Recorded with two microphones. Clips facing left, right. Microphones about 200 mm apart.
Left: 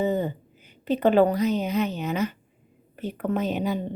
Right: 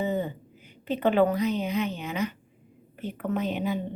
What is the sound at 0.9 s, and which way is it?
A woman's voice, 40° left (ahead or behind).